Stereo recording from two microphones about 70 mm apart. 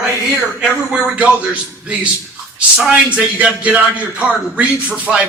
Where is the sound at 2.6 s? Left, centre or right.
Centre.